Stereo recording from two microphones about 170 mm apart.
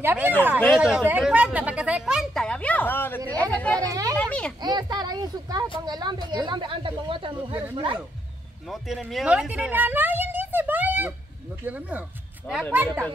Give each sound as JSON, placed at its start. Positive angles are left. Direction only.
{"t": 0.0, "sound": "a woman's voice", "side_deg": -10}
{"t": 3.9, "sound": "children playing", "side_deg": -20}
{"t": 4.2, "sound": "a sound", "side_deg": 5}
{"t": 4.6, "sound": "speech", "side_deg": -25}
{"t": 8.6, "sound": "speech", "side_deg": 0}
{"t": 12.5, "sound": "speech", "side_deg": 5}